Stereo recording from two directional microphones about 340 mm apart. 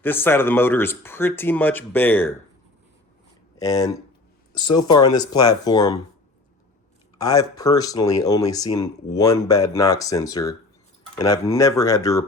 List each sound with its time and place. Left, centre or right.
0.0 s speech: centre
3.6 s speech: centre
4.7 s speech: left
4.9 s speech: centre
7.2 s speech: centre